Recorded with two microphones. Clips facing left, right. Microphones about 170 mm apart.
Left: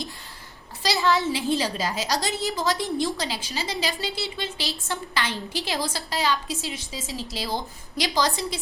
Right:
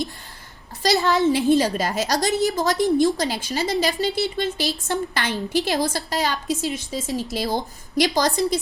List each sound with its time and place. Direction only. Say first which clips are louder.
0.8 s a woman's voice: right 4 dB; 45° right (ahead or behind)